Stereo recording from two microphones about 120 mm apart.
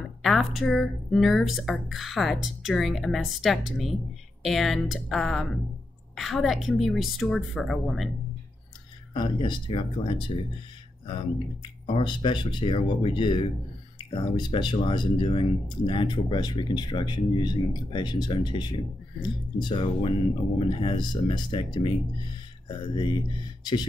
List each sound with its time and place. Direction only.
0.2 s speech: centre (ahead or behind)
9.1 s speech: 40° left (ahead or behind)